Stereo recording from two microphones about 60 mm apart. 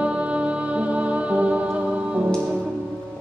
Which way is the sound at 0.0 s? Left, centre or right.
Right.